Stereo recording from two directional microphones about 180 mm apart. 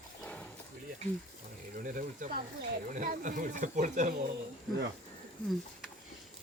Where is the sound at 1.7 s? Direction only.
50° right (ahead or behind).